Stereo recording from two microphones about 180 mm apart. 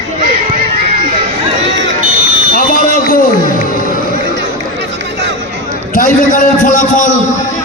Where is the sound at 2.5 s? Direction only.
50° left (ahead or behind).